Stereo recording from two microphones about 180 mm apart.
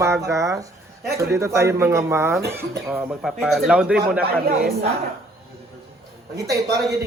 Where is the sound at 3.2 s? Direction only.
Centre (ahead or behind).